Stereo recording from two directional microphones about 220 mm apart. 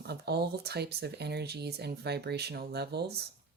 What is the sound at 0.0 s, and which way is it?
Speech, 45° right (ahead or behind).